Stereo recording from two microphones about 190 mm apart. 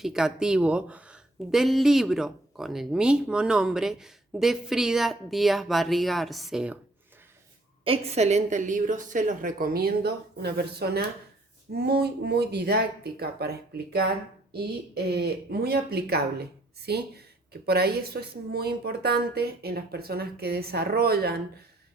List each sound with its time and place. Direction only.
0.0 s speech: 5° right (ahead or behind)
7.9 s a woman's voice: 35° right (ahead or behind); by 21.3 s 55° right (ahead or behind)